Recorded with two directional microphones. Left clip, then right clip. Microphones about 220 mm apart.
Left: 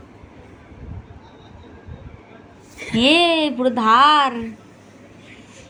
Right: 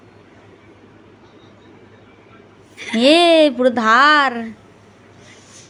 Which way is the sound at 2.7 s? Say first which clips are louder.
Right 3 dB; 25° right (ahead or behind).